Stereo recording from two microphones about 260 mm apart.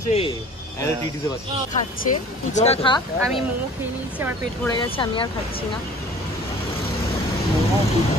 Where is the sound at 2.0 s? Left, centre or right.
Left.